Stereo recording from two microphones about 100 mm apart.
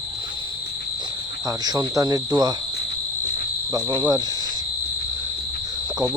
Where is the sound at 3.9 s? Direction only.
45° right (ahead or behind).